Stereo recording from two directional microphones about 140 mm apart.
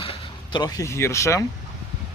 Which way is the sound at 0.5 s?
30° left (ahead or behind).